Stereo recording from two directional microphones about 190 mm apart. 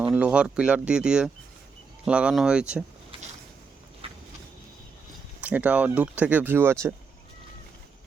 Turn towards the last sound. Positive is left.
turn(degrees=-10)  # may be behind; listen again after turning